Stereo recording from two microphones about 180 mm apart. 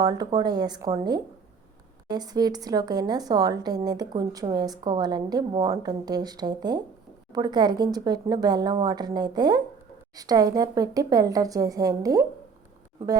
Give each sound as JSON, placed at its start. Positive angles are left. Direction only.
{"t": 0.0, "sound": "speech", "side_deg": -20}